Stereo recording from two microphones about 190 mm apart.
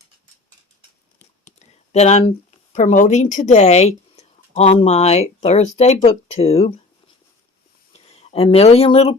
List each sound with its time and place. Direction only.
1.5 s a sound: 35° left (ahead or behind)
2.7 s speech: 45° left (ahead or behind)
7.9 s speech: 30° left (ahead or behind)